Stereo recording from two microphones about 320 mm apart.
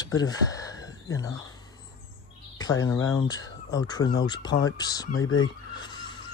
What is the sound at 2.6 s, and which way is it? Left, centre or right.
Speech, centre.